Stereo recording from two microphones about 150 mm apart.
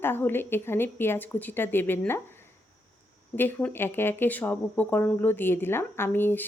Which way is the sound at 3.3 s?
15° left (ahead or behind).